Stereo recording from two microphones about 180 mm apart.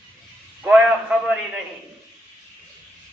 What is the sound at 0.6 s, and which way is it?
Speech, 5° right (ahead or behind).